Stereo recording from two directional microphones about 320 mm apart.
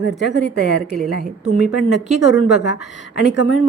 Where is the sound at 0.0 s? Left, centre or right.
Left.